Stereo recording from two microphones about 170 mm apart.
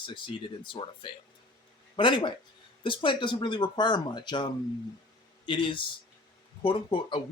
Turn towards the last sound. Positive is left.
turn(degrees=30)  # may be behind; listen again after turning